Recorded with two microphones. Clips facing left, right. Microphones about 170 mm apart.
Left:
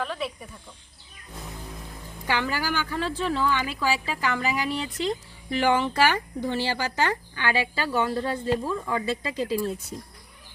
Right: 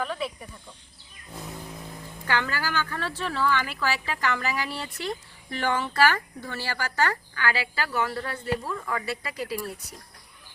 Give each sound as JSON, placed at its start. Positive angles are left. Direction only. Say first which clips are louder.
{"t": 0.0, "sound": "speech", "louder": "even", "side_deg": 0}
{"t": 2.2, "sound": "speech", "louder": "left 1 dB", "side_deg": 15}